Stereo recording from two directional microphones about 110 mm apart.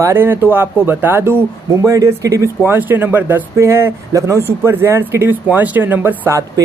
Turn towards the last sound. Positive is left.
turn(degrees=-25)  # may be behind; listen again after turning